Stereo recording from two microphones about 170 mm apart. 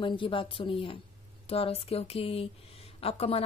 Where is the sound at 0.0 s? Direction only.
30° left (ahead or behind).